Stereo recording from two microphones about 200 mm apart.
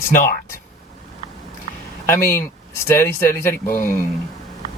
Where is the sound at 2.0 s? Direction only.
10° left (ahead or behind).